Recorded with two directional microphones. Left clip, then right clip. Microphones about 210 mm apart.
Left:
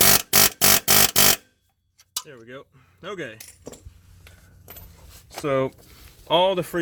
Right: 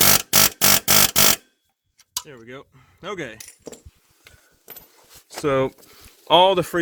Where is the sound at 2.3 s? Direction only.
45° right (ahead or behind).